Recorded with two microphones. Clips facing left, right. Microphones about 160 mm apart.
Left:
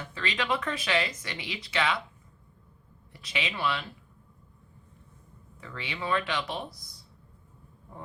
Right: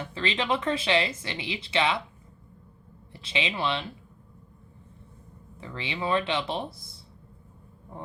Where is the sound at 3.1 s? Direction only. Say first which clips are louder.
Right 4 dB; 25° right (ahead or behind).